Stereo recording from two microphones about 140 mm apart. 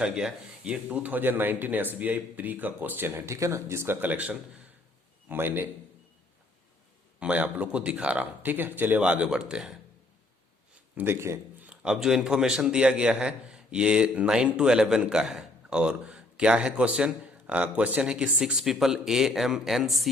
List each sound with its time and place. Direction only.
0.0 s a man's voice: 5° right (ahead or behind)
7.2 s a man's voice: 10° right (ahead or behind)
10.9 s speech: 15° right (ahead or behind)
11.7 s a man's voice: 5° right (ahead or behind)